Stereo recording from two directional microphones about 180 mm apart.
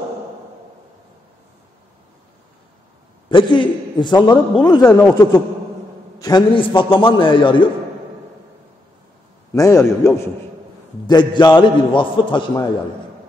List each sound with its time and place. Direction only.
3.3 s a man's voice: 25° left (ahead or behind)
4.8 s a man's voice: 10° left (ahead or behind)
6.1 s a man's voice: 20° left (ahead or behind)
9.5 s a man's voice: 15° left (ahead or behind)